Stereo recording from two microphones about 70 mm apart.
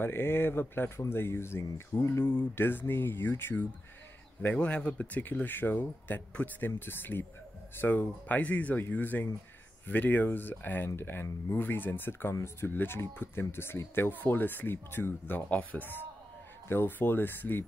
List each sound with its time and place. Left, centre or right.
0.0 s speech: left
4.6 s speech: centre; by 11.6 s left
11.6 s speech: left